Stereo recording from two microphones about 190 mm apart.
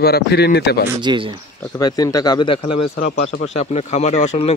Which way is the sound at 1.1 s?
25° right (ahead or behind).